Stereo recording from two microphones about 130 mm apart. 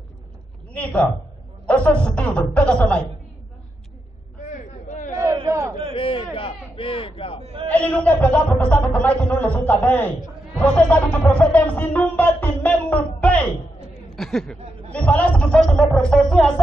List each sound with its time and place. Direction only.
0.7 s speech: 10° left (ahead or behind)
4.5 s a sound: 75° left (ahead or behind)
5.2 s crowd: 25° right (ahead or behind)
5.9 s speech: 45° left (ahead or behind)
7.6 s speech: 10° left (ahead or behind)